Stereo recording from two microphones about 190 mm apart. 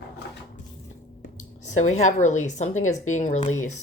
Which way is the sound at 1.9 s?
40° left (ahead or behind).